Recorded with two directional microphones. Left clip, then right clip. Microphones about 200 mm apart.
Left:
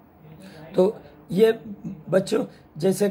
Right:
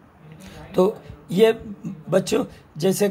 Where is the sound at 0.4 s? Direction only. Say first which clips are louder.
Right 1 dB; 20° right (ahead or behind).